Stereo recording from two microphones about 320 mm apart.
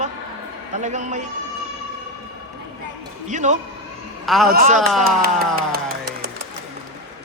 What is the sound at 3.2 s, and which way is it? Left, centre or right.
A man's voice, right.